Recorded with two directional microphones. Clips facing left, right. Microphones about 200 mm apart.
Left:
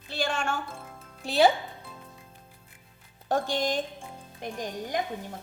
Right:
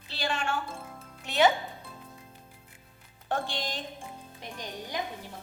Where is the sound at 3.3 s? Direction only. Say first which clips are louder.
Left 6 dB; 45° left (ahead or behind).